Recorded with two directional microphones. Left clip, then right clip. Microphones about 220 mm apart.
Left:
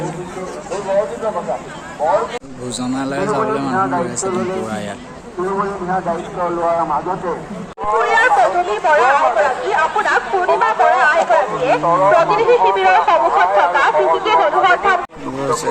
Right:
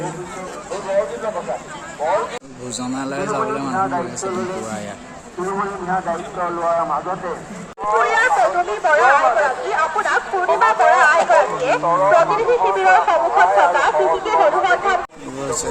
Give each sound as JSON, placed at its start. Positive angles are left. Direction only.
{"t": 2.0, "sound": "a man's voice", "side_deg": -30}
{"t": 2.8, "sound": "a man's voice", "side_deg": -5}
{"t": 3.4, "sound": "speech", "side_deg": 40}
{"t": 4.3, "sound": "speech", "side_deg": 50}
{"t": 6.6, "sound": "a man's voice", "side_deg": -15}
{"t": 6.9, "sound": "a man's voice", "side_deg": -35}
{"t": 7.9, "sound": "speech", "side_deg": -50}